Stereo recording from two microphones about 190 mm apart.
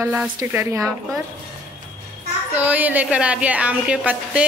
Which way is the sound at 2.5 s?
10° right (ahead or behind).